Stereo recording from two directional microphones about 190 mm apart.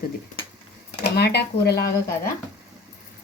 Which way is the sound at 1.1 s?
55° left (ahead or behind).